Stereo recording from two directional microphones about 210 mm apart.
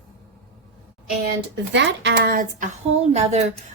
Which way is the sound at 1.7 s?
60° right (ahead or behind).